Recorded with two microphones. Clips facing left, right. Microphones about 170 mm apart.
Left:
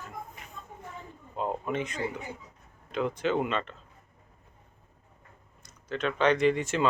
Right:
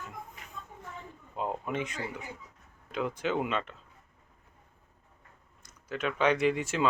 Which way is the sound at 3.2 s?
5° right (ahead or behind).